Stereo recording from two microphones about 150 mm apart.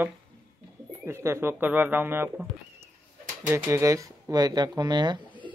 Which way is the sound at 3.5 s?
20° right (ahead or behind).